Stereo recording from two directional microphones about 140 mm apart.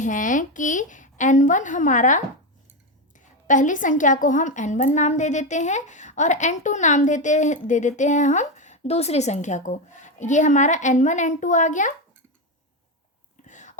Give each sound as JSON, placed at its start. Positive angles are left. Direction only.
{"t": 0.0, "sound": "a woman's voice", "side_deg": 65}
{"t": 13.5, "sound": "whispering", "side_deg": 60}